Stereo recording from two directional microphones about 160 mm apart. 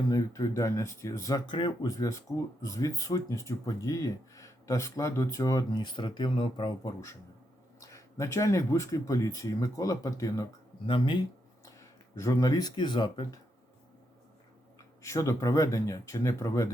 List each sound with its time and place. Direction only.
0.1 s speech: 20° left (ahead or behind)
11.6 s speech: 20° left (ahead or behind)
15.0 s speech: 20° left (ahead or behind)